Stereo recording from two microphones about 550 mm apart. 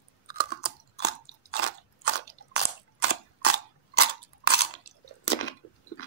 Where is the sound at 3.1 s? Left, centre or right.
Left.